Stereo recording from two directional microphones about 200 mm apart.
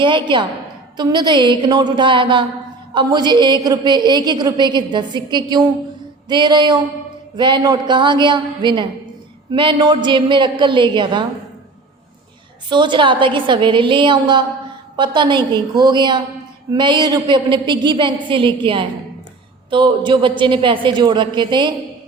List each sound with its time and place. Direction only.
0.0 s a woman's voice: 25° right (ahead or behind)
12.6 s a woman's voice: 25° right (ahead or behind)